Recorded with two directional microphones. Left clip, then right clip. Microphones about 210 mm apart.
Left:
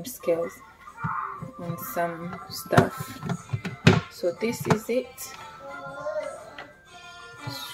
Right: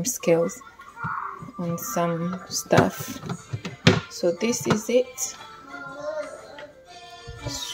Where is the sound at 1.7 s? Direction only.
35° right (ahead or behind).